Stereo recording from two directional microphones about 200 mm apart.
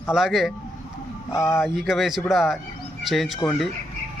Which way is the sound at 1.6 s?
Centre (ahead or behind).